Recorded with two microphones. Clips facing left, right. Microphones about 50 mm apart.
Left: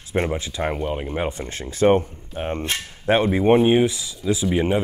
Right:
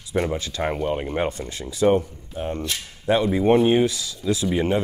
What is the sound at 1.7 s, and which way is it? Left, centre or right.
Speech, left.